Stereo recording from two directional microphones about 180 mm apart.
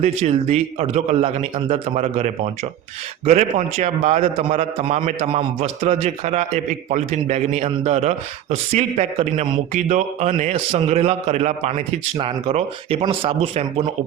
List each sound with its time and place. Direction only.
0.0 s a man's voice: 35° right (ahead or behind)
5.3 s a man's voice: 35° right (ahead or behind)